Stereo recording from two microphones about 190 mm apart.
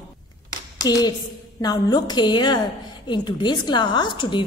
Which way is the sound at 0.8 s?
20° left (ahead or behind).